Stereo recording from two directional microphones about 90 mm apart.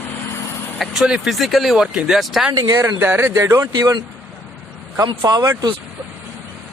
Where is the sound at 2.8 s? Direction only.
25° right (ahead or behind).